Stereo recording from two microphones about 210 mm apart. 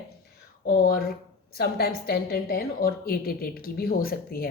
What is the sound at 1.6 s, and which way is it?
Speech, 45° left (ahead or behind).